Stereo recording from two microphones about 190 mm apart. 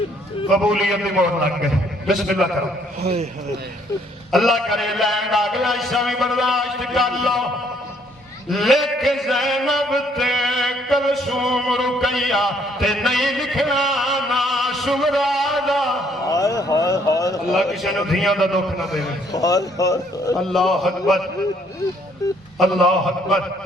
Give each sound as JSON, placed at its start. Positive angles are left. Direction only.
{"t": 0.5, "sound": "a man's voice", "side_deg": -5}
{"t": 4.3, "sound": "a man's voice", "side_deg": 0}
{"t": 8.4, "sound": "a sound", "side_deg": 0}
{"t": 16.3, "sound": "a sound", "side_deg": 15}
{"t": 17.5, "sound": "a man's voice", "side_deg": 0}
{"t": 19.3, "sound": "speech", "side_deg": 20}
{"t": 20.3, "sound": "a man's voice", "side_deg": 0}
{"t": 22.5, "sound": "a man's voice", "side_deg": 0}